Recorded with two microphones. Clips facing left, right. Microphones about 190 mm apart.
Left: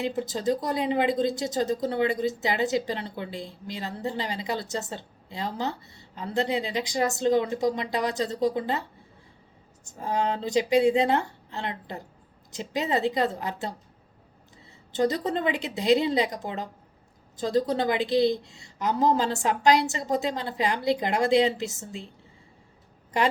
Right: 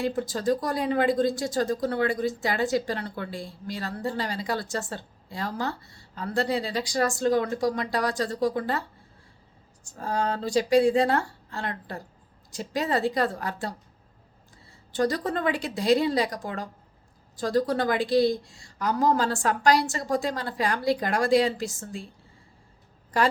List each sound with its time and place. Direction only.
0.0 s speech: 20° left (ahead or behind)
9.8 s speech: 20° left (ahead or behind)
14.9 s speech: 20° left (ahead or behind)
23.1 s speech: 20° left (ahead or behind)